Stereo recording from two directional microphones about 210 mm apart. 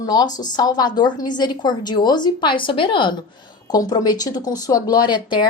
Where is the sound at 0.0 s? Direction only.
20° left (ahead or behind).